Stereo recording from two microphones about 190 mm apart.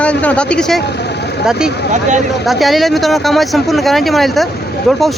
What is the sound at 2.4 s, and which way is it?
Speech, centre (ahead or behind).